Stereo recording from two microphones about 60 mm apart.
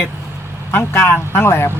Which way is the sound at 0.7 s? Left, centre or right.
Left.